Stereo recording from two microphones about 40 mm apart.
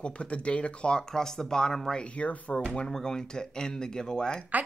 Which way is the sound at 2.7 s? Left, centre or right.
Centre.